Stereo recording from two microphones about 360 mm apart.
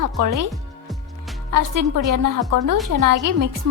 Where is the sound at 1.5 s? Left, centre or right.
Right.